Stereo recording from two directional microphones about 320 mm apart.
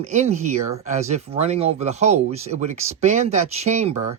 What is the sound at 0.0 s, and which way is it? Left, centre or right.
Speech, right.